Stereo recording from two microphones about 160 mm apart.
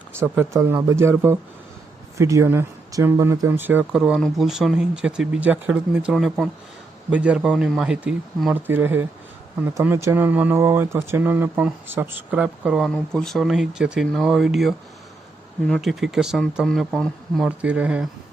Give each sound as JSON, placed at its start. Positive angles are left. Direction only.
{"t": 0.3, "sound": "speech", "side_deg": -15}